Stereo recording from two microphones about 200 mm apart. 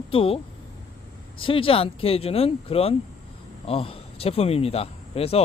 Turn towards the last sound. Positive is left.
turn(degrees=30)  # may be behind; listen again after turning